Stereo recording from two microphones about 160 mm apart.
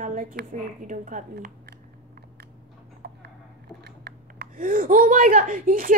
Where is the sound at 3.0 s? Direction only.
85° right.